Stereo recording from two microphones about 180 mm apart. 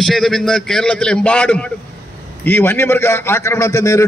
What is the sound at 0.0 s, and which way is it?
A man's voice, centre (ahead or behind).